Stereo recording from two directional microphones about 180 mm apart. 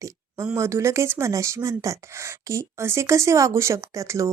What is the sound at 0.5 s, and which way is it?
A woman's voice, 15° right (ahead or behind).